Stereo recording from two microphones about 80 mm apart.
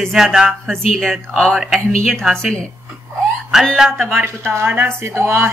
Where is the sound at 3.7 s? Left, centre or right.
Centre.